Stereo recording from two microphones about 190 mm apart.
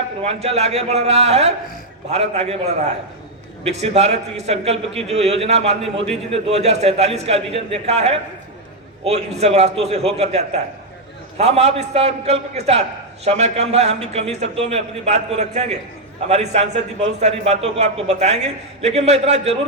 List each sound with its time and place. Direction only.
0.2 s a man's voice: 35° right (ahead or behind)